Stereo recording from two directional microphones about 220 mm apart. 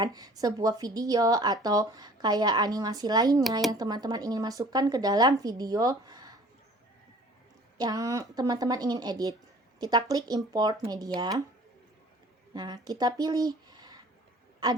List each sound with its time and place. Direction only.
0.0 s speech: 15° right (ahead or behind)
7.8 s speech: 15° right (ahead or behind)
12.5 s speech: 15° right (ahead or behind)